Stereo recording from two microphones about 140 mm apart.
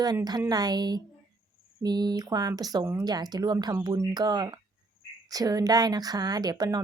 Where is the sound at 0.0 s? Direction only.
25° right (ahead or behind).